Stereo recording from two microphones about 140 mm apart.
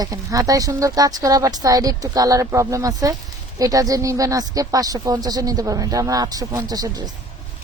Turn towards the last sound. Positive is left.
turn(degrees=-25)  # may be behind; listen again after turning